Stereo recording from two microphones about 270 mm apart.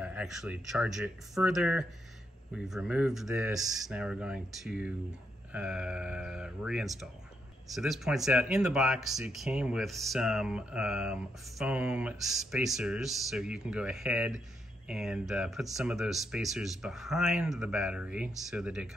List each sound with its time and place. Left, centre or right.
0.0 s speech: centre